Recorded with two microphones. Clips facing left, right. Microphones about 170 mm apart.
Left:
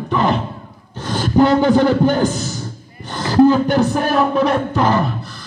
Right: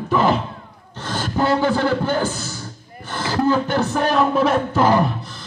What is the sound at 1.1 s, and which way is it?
A man's voice, 20° left (ahead or behind).